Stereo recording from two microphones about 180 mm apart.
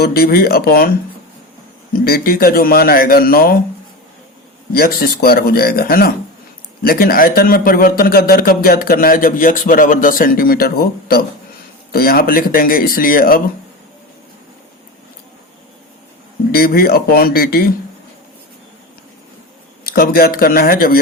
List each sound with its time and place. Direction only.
0.0 s a man's voice: 55° left (ahead or behind)
4.7 s a man's voice: 55° left (ahead or behind)
16.5 s a man's voice: 55° left (ahead or behind)
19.8 s a man's voice: 55° left (ahead or behind)